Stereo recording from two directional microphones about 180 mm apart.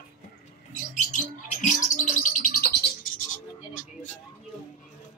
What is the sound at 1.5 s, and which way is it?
Bird, 45° left (ahead or behind).